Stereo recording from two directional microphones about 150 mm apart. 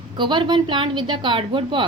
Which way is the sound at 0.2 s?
30° right (ahead or behind).